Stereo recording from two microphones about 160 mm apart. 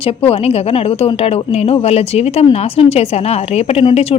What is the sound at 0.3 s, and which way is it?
Speech, 40° left (ahead or behind).